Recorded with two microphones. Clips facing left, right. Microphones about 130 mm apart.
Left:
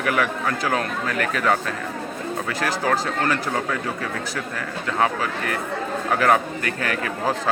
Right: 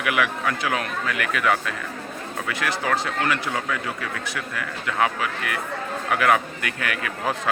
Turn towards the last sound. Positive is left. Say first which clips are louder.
# left 3 dB
turn(degrees=35)  # may be behind; listen again after turning